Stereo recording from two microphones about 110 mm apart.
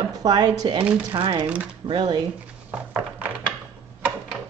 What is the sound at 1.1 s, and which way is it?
Speech, 50° right (ahead or behind).